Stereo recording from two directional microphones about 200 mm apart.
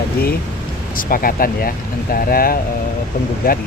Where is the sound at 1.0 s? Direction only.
45° left (ahead or behind).